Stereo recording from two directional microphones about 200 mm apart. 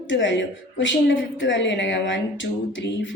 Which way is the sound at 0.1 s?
65° left (ahead or behind).